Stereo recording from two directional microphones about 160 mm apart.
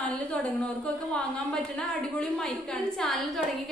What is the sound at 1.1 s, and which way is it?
A woman's voice, 5° left (ahead or behind).